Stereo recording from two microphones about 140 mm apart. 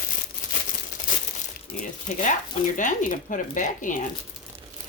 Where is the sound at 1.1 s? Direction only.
70° left (ahead or behind).